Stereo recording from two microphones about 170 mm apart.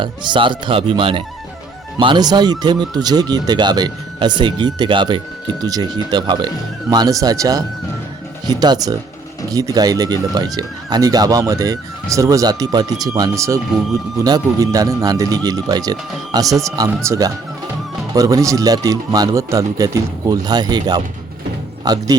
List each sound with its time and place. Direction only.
0.0 s speech: 30° right (ahead or behind)